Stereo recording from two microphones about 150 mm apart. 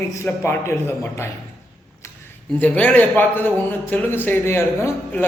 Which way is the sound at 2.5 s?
10° left (ahead or behind).